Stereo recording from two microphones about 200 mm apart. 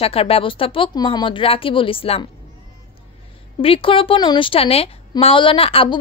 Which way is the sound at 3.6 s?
25° left (ahead or behind).